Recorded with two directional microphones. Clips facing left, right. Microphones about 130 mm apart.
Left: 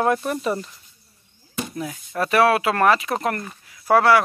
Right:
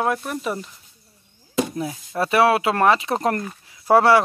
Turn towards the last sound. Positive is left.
turn(degrees=-25)  # may be behind; listen again after turning